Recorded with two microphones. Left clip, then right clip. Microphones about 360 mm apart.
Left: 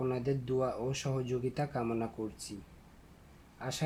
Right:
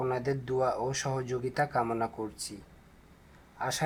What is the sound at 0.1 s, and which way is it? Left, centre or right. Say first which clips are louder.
Speech: right 3 dB; right.